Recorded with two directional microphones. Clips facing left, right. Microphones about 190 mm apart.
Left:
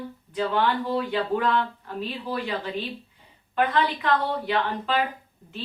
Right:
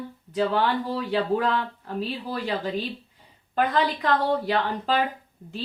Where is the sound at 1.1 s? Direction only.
40° right (ahead or behind).